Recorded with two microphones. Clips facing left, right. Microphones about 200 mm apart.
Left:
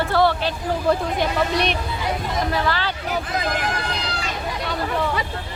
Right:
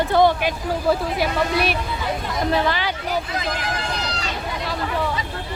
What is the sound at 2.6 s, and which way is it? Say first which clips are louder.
Speech: right 1 dB; 15° right (ahead or behind).